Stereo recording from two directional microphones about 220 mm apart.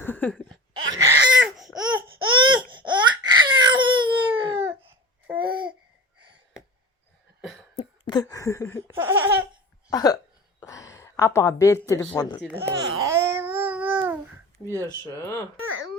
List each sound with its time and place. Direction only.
0.0 s speech: 10° left (ahead or behind)
0.4 s a sound: 15° right (ahead or behind)
1.7 s laughter: 20° right (ahead or behind)
2.2 s baby cry: 20° right (ahead or behind)
5.2 s babbling: 5° right (ahead or behind)
7.8 s a sound: 20° left (ahead or behind)
9.0 s laughter: 10° right (ahead or behind)
9.9 s hiccup: 15° left (ahead or behind)
10.6 s speech: 15° left (ahead or behind)
12.4 s speech: 5° right (ahead or behind)
13.0 s babbling: 10° right (ahead or behind)
14.6 s speech: 15° left (ahead or behind)
15.6 s a sound: 65° right (ahead or behind)